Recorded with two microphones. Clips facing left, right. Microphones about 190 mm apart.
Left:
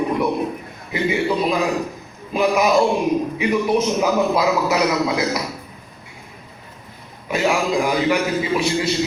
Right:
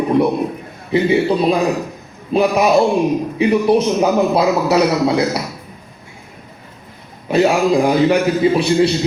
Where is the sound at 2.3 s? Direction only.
30° right (ahead or behind).